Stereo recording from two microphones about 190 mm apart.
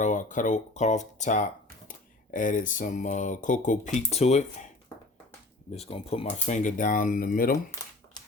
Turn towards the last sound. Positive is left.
turn(degrees=50)  # may be behind; listen again after turning